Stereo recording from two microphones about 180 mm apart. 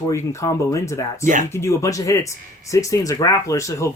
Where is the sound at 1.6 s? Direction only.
15° left (ahead or behind).